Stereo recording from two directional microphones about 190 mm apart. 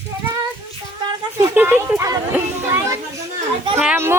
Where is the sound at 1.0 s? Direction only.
20° right (ahead or behind).